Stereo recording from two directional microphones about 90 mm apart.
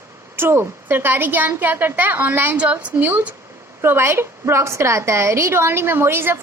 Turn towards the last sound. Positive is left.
turn(degrees=-25)  # may be behind; listen again after turning